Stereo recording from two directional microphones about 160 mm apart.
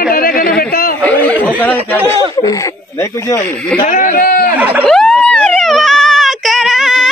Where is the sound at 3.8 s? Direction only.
55° left (ahead or behind).